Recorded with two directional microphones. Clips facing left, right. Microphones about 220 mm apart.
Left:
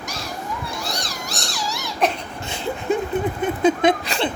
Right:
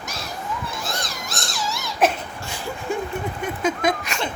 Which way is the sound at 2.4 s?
20° left (ahead or behind).